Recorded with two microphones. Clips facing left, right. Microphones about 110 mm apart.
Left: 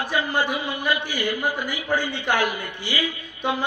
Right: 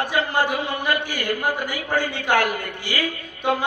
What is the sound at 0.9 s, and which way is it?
A man's voice, 50° right (ahead or behind).